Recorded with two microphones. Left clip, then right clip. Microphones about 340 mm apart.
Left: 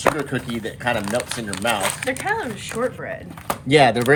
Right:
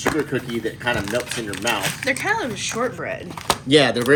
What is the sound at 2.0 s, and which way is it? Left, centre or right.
Speech, centre.